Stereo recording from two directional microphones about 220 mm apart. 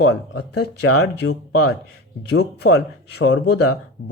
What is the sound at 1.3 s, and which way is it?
Speech, 85° left.